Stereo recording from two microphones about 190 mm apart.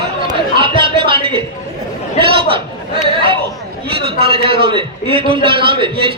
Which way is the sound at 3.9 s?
30° right (ahead or behind).